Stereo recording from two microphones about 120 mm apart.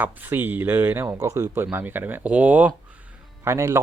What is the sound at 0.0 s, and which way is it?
Speech, 15° right (ahead or behind).